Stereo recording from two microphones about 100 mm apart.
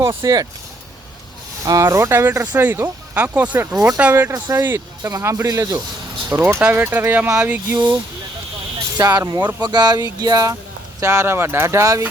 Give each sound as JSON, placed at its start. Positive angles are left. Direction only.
{"t": 0.2, "sound": "speech", "side_deg": -35}
{"t": 1.8, "sound": "speech", "side_deg": -25}
{"t": 5.0, "sound": "speech", "side_deg": -30}
{"t": 6.3, "sound": "speech", "side_deg": -20}
{"t": 9.0, "sound": "speech", "side_deg": -40}
{"t": 11.0, "sound": "speech", "side_deg": -25}